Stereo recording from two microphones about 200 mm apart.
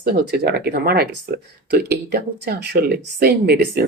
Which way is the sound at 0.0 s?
50° right (ahead or behind).